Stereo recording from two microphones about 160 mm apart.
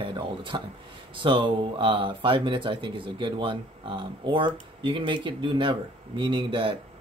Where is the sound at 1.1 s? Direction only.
30° right (ahead or behind).